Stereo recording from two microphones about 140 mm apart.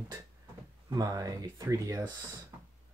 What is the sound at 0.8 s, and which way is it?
Speech, 25° right (ahead or behind).